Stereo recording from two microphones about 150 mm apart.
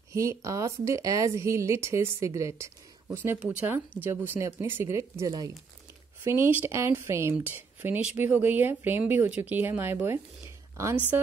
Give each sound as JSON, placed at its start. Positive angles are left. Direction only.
{"t": 0.1, "sound": "speech", "side_deg": -20}